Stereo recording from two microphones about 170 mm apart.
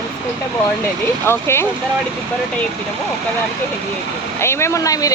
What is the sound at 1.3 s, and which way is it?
Speech, 15° left (ahead or behind).